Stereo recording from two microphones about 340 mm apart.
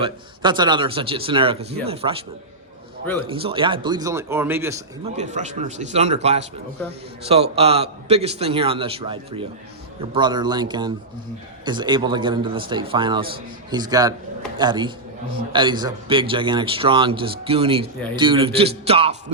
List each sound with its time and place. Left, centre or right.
0.0 s a man's voice: centre
3.2 s a man's voice: centre
5.0 s a man's voice: centre